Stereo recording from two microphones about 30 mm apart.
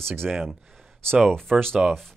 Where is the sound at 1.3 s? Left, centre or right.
Centre.